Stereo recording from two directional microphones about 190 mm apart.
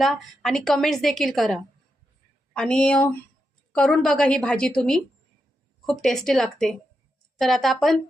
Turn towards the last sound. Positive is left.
turn(degrees=0)  # may be behind; listen again after turning